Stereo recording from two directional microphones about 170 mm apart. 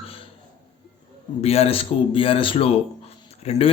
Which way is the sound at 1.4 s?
35° left (ahead or behind).